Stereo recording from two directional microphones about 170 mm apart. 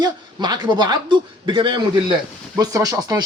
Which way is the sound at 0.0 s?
25° right (ahead or behind).